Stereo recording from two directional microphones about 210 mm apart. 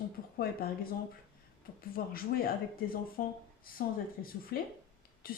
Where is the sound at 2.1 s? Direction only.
45° left (ahead or behind).